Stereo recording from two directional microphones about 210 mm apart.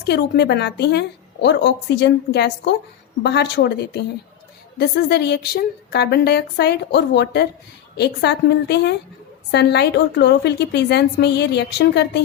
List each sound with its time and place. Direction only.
0.0 s a woman's voice: 55° left (ahead or behind)